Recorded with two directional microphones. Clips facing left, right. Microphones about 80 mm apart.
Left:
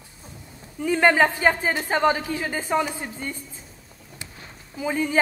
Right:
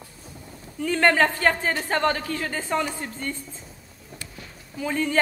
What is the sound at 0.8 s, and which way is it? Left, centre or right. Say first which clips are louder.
Speech: left 1 dB; centre.